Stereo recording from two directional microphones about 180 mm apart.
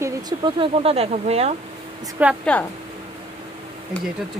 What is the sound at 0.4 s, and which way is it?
Speech, 30° right (ahead or behind).